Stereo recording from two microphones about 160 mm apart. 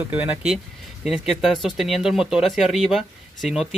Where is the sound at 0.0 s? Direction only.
10° right (ahead or behind).